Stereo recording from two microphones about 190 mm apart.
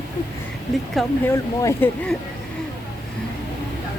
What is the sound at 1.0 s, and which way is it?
Speech, centre (ahead or behind).